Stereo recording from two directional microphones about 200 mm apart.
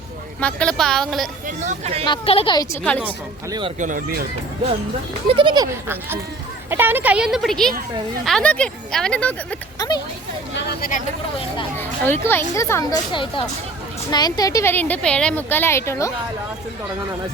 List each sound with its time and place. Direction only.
0.3 s speech: 5° left (ahead or behind)
1.5 s speech: 35° right (ahead or behind)
2.0 s a woman's voice: 30° left (ahead or behind)
3.8 s speech: 40° right (ahead or behind)
5.3 s speech: 25° right (ahead or behind)
6.7 s speech: 10° right (ahead or behind); by 9.3 s 5° left (ahead or behind)
9.7 s speech: 20° left (ahead or behind)
10.5 s speech: 50° left (ahead or behind)
11.8 s a woman's voice: 10° left (ahead or behind)